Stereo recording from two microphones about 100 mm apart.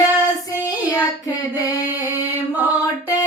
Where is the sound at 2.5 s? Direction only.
20° right (ahead or behind).